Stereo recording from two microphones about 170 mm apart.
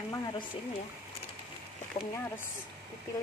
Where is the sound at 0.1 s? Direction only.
25° left (ahead or behind).